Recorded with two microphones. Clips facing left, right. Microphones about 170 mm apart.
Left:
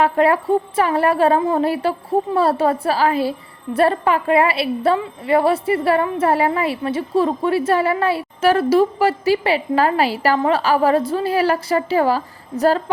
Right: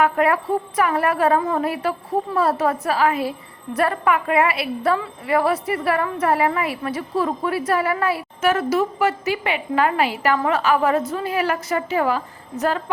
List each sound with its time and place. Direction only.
0.0 s a woman's voice: 30° left (ahead or behind)